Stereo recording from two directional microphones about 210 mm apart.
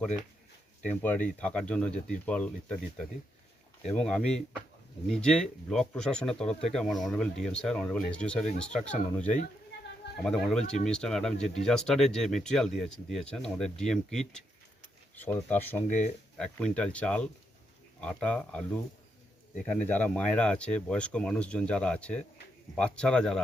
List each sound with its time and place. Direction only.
0.9 s speech: 5° left (ahead or behind)
15.9 s speech: 35° left (ahead or behind)
16.4 s speech: 5° left (ahead or behind)